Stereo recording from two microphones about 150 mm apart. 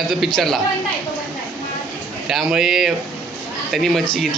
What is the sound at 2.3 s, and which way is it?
A man's voice, 5° right (ahead or behind).